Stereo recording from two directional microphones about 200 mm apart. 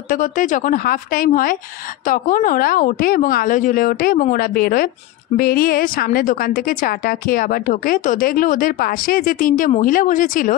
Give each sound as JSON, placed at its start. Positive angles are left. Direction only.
{"t": 0.1, "sound": "a woman's voice", "side_deg": 40}